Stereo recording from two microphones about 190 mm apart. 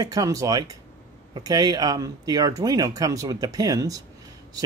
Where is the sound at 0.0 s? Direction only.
20° right (ahead or behind).